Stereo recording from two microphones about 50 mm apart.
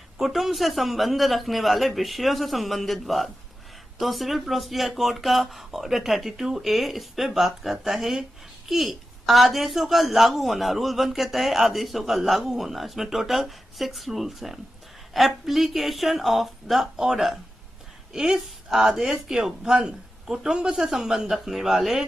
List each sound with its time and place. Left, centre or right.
0.2 s speech: centre